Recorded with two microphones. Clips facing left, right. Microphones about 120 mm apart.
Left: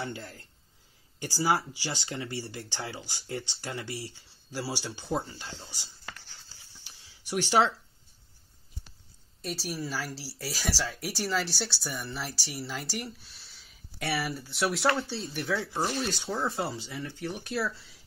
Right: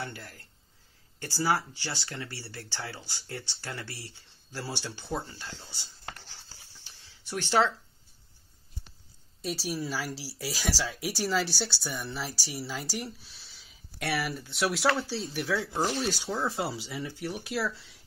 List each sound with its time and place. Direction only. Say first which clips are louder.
0.0 s speech: left 3 dB; 20° left (ahead or behind)
6.8 s a sound: even; 15° left (ahead or behind)
9.4 s speech: right 2 dB; centre (ahead or behind)
15.5 s speech: right 1 dB; 15° right (ahead or behind)
16.0 s speech: right 1 dB; centre (ahead or behind)
16.7 s speech: right 1 dB; 10° right (ahead or behind)